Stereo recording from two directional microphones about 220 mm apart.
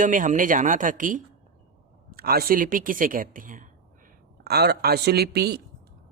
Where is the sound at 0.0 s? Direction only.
35° right (ahead or behind).